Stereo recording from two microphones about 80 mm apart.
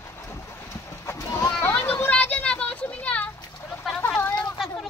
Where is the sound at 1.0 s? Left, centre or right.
Left.